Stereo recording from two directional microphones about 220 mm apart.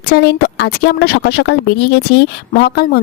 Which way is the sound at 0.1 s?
50° left (ahead or behind).